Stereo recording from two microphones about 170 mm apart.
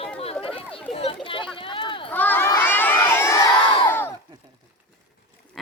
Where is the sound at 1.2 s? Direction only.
30° left (ahead or behind).